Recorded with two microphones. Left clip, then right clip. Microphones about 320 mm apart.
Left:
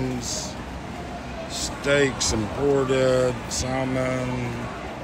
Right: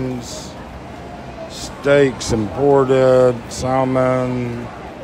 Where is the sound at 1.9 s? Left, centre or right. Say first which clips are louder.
Right 7 dB; centre.